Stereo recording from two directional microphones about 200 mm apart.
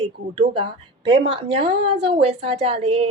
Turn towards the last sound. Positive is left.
turn(degrees=-30)  # may be behind; listen again after turning